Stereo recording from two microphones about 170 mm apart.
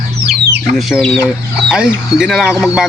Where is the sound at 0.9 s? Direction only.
Centre (ahead or behind).